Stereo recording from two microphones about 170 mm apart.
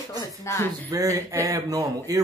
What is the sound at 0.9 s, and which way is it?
Speech, 20° right (ahead or behind).